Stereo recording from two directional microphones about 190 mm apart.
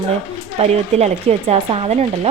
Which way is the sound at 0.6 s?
35° right (ahead or behind).